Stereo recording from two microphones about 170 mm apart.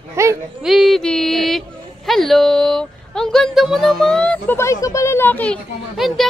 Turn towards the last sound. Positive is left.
turn(degrees=0)  # may be behind; listen again after turning